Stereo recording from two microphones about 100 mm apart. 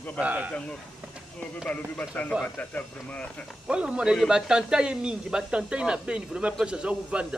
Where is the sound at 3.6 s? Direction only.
10° right (ahead or behind).